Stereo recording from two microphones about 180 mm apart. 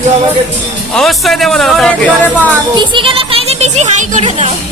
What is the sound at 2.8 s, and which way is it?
A child's voice, 25° right (ahead or behind).